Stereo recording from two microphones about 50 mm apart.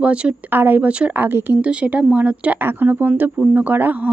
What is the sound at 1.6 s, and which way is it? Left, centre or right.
Speech, right.